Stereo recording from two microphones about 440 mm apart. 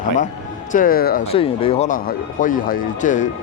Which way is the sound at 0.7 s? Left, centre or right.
Centre.